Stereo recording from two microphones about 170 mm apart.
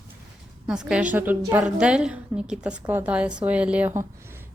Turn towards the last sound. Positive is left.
turn(degrees=-10)  # may be behind; listen again after turning